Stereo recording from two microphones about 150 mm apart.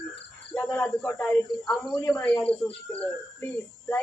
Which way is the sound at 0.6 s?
10° left (ahead or behind).